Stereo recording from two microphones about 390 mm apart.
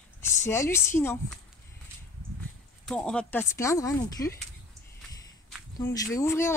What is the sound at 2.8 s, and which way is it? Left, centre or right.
Speech, centre.